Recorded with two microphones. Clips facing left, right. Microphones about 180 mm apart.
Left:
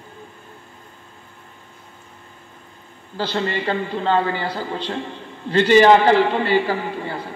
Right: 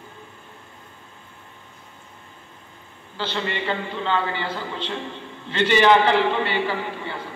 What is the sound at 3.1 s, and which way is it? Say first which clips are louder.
A man's voice: left 4 dB; 40° left (ahead or behind).